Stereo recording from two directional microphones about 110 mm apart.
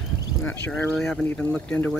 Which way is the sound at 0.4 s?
20° left (ahead or behind).